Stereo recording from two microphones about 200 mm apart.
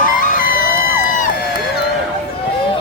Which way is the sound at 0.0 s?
40° left (ahead or behind).